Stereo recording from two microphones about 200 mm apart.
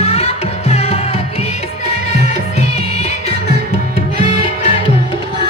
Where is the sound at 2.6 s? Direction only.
30° left (ahead or behind).